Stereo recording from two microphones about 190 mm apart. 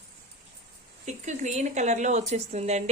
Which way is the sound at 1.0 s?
40° right (ahead or behind).